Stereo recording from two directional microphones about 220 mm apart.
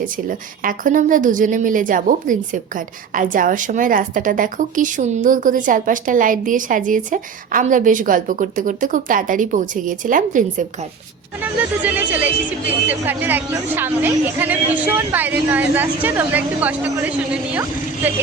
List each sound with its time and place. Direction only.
0.3 s speech: 40° right (ahead or behind)
11.8 s a woman's voice: 5° right (ahead or behind)